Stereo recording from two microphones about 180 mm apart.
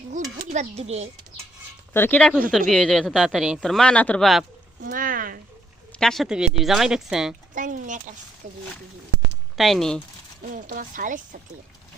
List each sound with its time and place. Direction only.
0.1 s a sound: 40° right (ahead or behind)
1.9 s a woman's voice: 10° left (ahead or behind)
4.9 s speech: 50° right (ahead or behind)
6.0 s a woman's voice: centre (ahead or behind)
7.5 s speech: 45° right (ahead or behind)
9.6 s a woman's voice: centre (ahead or behind)
10.5 s speech: 50° right (ahead or behind)